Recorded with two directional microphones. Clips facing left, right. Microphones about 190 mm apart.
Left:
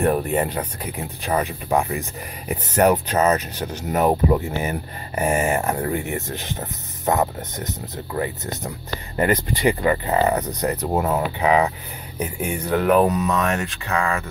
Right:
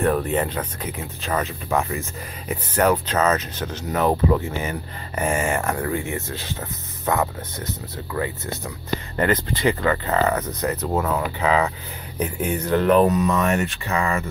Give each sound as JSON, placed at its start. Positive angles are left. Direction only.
{"t": 0.0, "sound": "speech", "side_deg": 15}
{"t": 4.5, "sound": "speech", "side_deg": 40}
{"t": 5.2, "sound": "speech", "side_deg": 20}
{"t": 9.1, "sound": "speech", "side_deg": 15}
{"t": 13.3, "sound": "speech", "side_deg": -5}